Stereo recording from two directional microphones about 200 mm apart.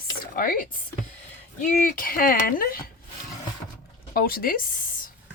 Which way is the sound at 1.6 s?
40° left (ahead or behind).